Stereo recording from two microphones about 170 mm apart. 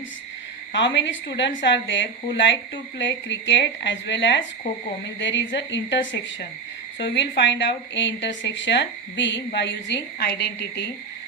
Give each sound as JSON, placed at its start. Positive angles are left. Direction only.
{"t": 0.9, "sound": "a woman's voice", "side_deg": 90}